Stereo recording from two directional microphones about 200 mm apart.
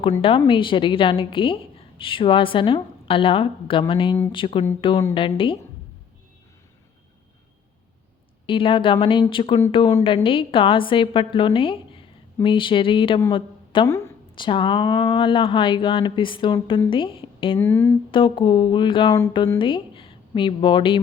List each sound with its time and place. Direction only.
0.2 s a woman's voice: 25° left (ahead or behind)
8.4 s a woman's voice: 25° left (ahead or behind)
17.6 s a sound: 10° left (ahead or behind)
18.1 s a woman's voice: 25° left (ahead or behind)